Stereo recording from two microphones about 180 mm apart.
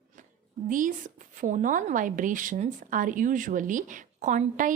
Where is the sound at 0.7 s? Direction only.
45° right (ahead or behind).